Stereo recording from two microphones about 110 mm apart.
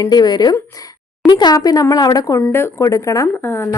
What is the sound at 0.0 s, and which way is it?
A woman's voice, 40° left (ahead or behind).